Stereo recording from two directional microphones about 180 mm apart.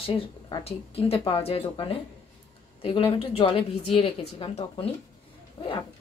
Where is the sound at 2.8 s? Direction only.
30° left (ahead or behind).